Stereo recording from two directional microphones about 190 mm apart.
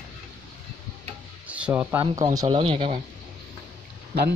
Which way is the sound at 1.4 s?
5° right (ahead or behind).